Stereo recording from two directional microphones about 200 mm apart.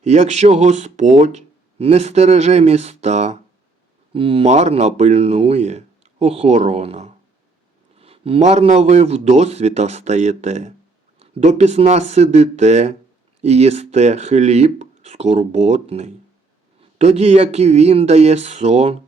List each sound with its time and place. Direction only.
0.0 s speech: 35° right (ahead or behind)